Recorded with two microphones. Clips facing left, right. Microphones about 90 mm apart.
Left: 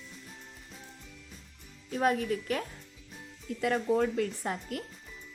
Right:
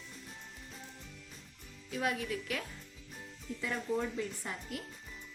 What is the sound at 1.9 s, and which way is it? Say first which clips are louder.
Speech: left 7 dB; 40° left (ahead or behind).